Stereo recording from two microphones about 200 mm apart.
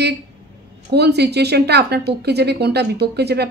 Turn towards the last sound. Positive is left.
turn(degrees=-55)  # may be behind; listen again after turning